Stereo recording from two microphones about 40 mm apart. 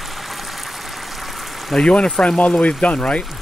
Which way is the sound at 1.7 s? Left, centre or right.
Centre.